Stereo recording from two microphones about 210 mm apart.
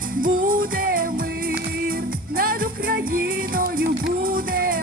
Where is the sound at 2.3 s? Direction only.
45° right (ahead or behind).